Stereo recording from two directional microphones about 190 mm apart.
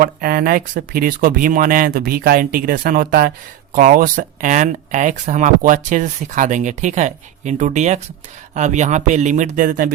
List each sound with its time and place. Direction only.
0.0 s speech: 50° right (ahead or behind)